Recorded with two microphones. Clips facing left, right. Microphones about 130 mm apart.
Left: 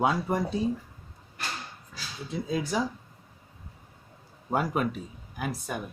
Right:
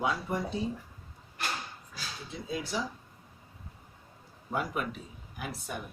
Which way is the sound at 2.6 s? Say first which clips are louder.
Left 5 dB; 45° left (ahead or behind).